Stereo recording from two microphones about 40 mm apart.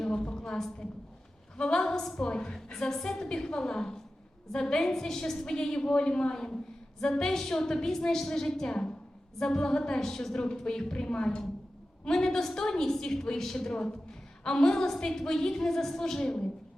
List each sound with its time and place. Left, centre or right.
0.0 s a sound: left
1.5 s a woman's voice: centre
2.2 s a woman's voice: left